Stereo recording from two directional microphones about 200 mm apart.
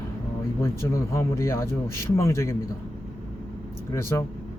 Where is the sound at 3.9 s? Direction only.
15° left (ahead or behind).